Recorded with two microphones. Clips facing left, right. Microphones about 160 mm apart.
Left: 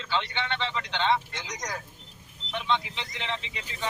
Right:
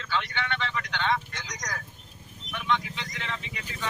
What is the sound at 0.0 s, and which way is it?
Speech, 25° left (ahead or behind).